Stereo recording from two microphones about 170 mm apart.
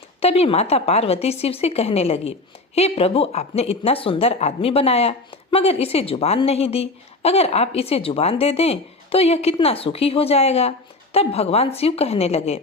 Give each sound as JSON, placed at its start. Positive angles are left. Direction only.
{"t": 0.2, "sound": "a woman's voice", "side_deg": 35}